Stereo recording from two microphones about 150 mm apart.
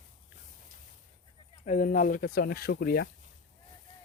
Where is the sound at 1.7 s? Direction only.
60° left (ahead or behind); by 3.0 s 85° left.